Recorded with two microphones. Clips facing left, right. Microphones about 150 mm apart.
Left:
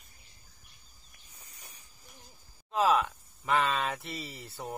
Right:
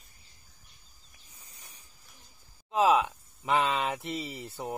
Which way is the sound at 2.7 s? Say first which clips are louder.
Right 2 dB; 15° right (ahead or behind).